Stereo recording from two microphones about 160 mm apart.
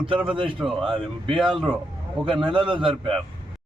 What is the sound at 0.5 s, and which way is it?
Speech, centre (ahead or behind).